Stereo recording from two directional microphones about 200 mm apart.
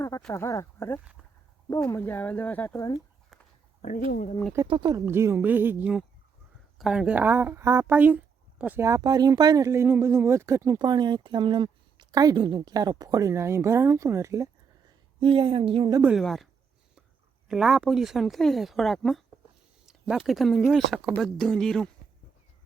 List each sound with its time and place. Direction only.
0.2 s speech: 5° left (ahead or behind)
3.8 s speech: 40° left (ahead or behind)
4.5 s speech: 20° right (ahead or behind)
15.2 s speech: 25° right (ahead or behind)
16.0 s speech: 5° right (ahead or behind)
17.5 s speech: centre (ahead or behind)